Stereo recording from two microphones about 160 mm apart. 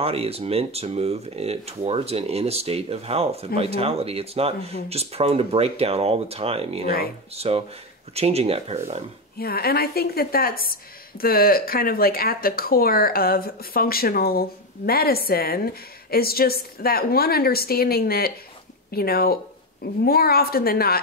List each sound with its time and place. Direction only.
0.0 s speech: 40° right (ahead or behind)
9.4 s speech: 70° left (ahead or behind)